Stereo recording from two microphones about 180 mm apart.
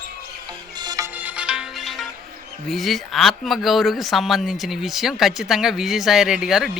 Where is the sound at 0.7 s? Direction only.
20° right (ahead or behind).